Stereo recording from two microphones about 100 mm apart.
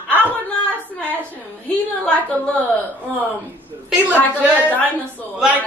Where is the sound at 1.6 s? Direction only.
15° left (ahead or behind).